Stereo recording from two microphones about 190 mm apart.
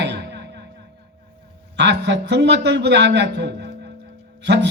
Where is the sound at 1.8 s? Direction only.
65° right (ahead or behind).